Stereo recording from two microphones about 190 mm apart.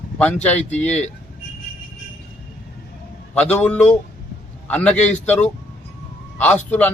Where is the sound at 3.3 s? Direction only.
5° left (ahead or behind).